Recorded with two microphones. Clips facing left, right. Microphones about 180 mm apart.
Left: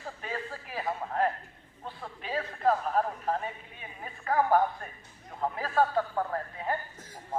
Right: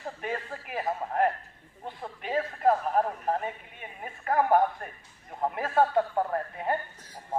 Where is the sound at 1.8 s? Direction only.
20° right (ahead or behind).